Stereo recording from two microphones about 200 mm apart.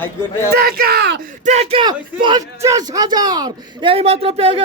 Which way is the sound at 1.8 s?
20° right (ahead or behind).